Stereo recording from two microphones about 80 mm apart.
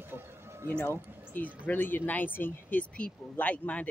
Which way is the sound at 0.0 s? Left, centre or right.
Right.